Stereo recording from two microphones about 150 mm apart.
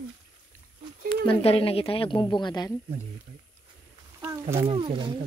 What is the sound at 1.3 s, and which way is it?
A woman's voice, 40° left (ahead or behind).